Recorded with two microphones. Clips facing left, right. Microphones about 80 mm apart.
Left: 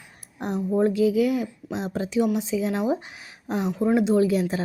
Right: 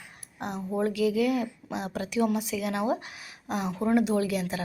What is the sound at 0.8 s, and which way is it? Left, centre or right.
Speech, left.